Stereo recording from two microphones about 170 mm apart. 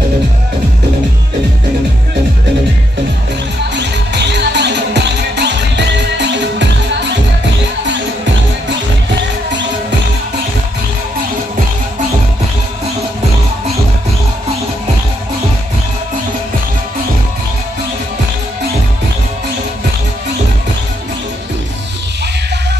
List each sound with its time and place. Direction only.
3.7 s music: 90° right